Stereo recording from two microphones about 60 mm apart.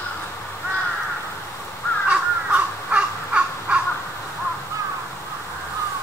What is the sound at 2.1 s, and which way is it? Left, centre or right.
Crow, centre.